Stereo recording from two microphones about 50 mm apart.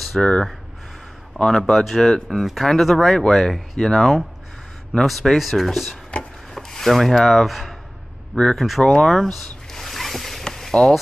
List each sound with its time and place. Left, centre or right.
0.2 s speech: centre
1.3 s speech: centre
6.5 s rub: centre
8.5 s speech: centre
9.0 s zipper: centre